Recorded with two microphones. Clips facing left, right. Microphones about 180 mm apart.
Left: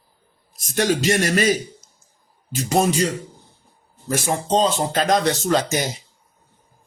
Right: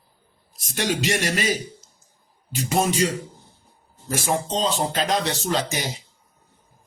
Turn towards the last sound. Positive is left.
turn(degrees=45)  # may be behind; listen again after turning